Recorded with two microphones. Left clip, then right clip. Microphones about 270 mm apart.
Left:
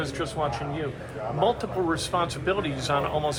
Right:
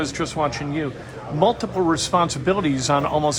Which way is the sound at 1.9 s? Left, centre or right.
Right.